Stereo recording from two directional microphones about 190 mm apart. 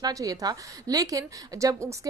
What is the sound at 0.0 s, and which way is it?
A woman's voice, 20° right (ahead or behind).